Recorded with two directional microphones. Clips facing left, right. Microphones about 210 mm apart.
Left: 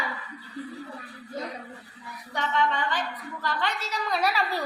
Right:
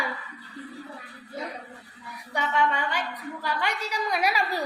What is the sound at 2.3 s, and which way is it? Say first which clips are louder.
A woman's voice: right 1 dB; 10° right (ahead or behind).